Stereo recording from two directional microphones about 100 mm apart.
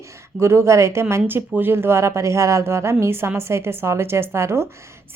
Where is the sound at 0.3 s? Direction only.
25° right (ahead or behind).